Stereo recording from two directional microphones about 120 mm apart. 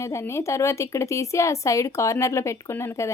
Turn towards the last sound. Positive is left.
turn(degrees=25)  # may be behind; listen again after turning